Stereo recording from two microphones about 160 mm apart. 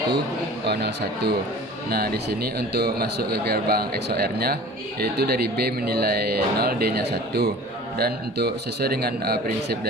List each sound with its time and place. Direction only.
0.7 s speech: 90° right
1.9 s a man's voice: 75° right (ahead or behind)